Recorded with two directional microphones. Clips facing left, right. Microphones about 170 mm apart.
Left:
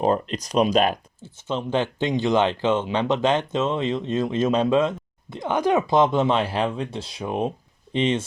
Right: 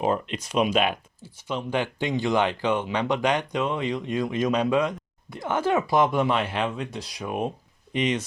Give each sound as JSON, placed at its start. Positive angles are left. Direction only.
{"t": 0.0, "sound": "speech", "side_deg": 35}
{"t": 1.2, "sound": "speech", "side_deg": 25}